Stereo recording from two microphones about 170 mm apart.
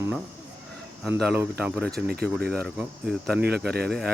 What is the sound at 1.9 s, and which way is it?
Speech, 65° right (ahead or behind).